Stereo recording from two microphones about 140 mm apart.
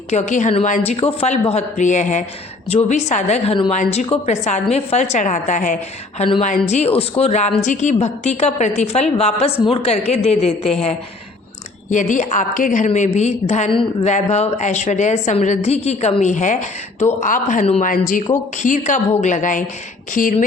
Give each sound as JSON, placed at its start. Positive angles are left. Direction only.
{"t": 0.1, "sound": "a woman's voice", "side_deg": 60}
{"t": 0.9, "sound": "a woman's voice", "side_deg": 45}
{"t": 2.6, "sound": "a woman's voice", "side_deg": 50}
{"t": 6.1, "sound": "a woman's voice", "side_deg": 40}
{"t": 6.4, "sound": "a woman's voice", "side_deg": 55}
{"t": 11.9, "sound": "a woman's voice", "side_deg": 65}
{"t": 20.2, "sound": "speech", "side_deg": 80}